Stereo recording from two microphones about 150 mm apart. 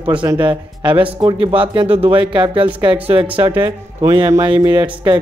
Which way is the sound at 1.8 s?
10° right (ahead or behind).